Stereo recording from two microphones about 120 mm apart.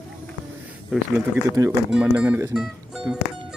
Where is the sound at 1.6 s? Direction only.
30° right (ahead or behind).